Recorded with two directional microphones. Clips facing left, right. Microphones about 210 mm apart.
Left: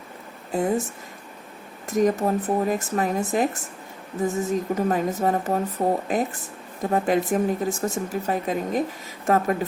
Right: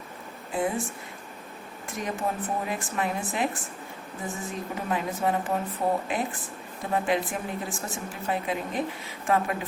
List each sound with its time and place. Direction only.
0.5 s speech: 40° left (ahead or behind)
1.9 s speech: 40° left (ahead or behind)